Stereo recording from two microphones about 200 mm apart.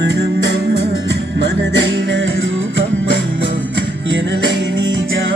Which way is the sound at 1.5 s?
60° right (ahead or behind).